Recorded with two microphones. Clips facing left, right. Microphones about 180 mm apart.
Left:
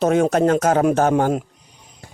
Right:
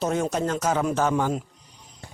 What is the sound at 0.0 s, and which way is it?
Speech, 70° left (ahead or behind).